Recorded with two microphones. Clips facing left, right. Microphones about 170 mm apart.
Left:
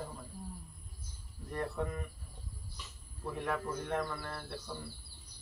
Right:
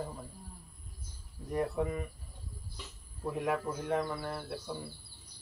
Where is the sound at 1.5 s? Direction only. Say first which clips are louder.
Right 5 dB; 10° right (ahead or behind).